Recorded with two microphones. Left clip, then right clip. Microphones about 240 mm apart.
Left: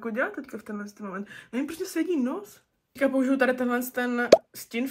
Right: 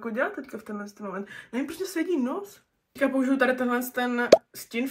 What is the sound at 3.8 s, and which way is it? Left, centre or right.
Speech, centre.